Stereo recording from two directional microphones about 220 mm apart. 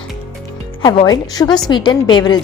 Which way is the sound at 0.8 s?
20° left (ahead or behind).